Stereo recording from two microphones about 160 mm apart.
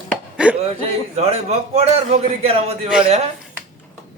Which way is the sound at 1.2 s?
40° right (ahead or behind).